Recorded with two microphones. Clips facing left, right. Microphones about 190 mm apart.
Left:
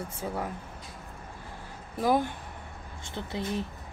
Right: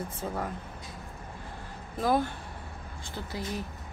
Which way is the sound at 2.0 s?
15° left (ahead or behind).